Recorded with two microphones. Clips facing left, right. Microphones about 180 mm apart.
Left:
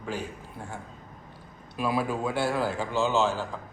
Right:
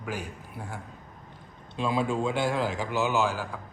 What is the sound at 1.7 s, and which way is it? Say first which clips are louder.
A man's voice: right 1 dB; 25° right (ahead or behind).